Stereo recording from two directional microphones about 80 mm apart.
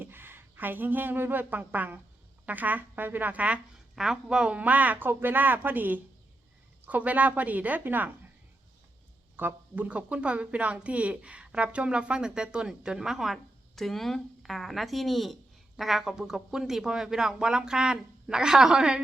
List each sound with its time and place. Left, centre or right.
0.0 s a woman's voice: right
3.9 s speech: centre; by 8.1 s right
9.3 s speech: right